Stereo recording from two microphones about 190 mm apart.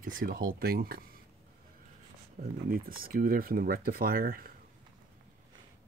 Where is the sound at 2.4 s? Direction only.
50° right (ahead or behind).